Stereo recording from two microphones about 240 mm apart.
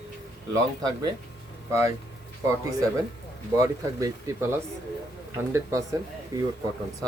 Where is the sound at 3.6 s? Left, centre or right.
Centre.